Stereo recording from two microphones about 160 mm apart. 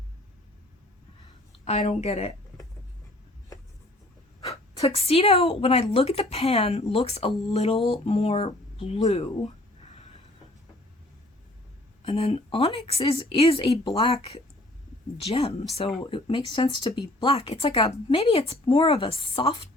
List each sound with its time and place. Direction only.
1.6 s a woman's voice: 45° left (ahead or behind)
4.8 s a woman's voice: 40° left (ahead or behind)
12.0 s a woman's voice: 35° left (ahead or behind)